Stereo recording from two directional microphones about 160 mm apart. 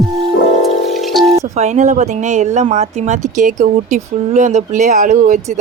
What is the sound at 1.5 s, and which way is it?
Speech, 45° right (ahead or behind).